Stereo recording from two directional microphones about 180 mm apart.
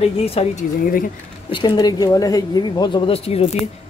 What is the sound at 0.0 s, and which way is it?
Speech, 35° left (ahead or behind).